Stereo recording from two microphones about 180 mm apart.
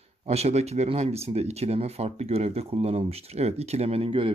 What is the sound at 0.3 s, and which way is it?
Speech, 35° right (ahead or behind).